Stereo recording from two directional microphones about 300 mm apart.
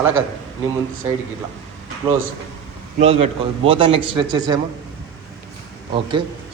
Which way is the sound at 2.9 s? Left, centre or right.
Centre.